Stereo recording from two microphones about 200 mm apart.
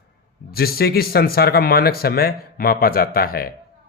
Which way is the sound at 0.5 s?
50° left (ahead or behind).